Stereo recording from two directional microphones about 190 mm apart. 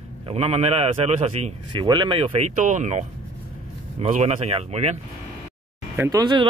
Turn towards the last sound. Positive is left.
turn(degrees=-20)  # may be behind; listen again after turning